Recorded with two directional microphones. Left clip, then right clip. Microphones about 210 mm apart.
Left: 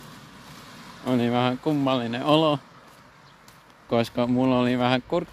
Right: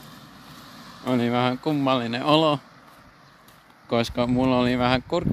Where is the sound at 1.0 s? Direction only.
10° right (ahead or behind).